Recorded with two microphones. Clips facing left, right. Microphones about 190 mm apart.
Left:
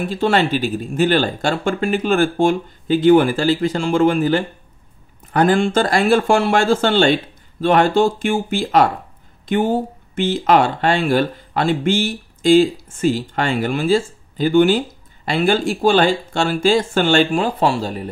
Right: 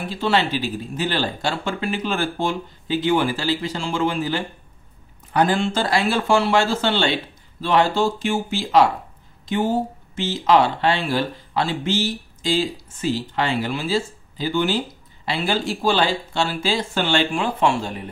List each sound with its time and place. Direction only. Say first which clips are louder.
0.1 s speech: left 3 dB; 50° left (ahead or behind)